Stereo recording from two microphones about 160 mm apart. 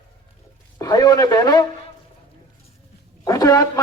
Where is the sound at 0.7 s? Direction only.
25° left (ahead or behind).